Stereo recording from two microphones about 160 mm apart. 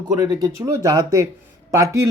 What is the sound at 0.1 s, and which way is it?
A man's voice, 25° right (ahead or behind).